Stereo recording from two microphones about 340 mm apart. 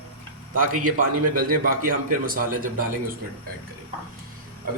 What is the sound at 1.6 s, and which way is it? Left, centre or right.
Speech, right.